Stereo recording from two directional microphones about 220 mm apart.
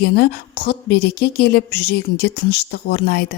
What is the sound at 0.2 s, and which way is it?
Speech, 45° left (ahead or behind).